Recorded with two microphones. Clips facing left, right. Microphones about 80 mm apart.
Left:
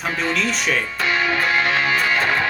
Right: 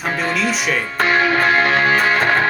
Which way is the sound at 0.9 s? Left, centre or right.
Right.